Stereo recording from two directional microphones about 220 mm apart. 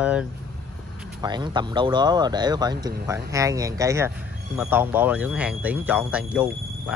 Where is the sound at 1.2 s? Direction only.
20° right (ahead or behind).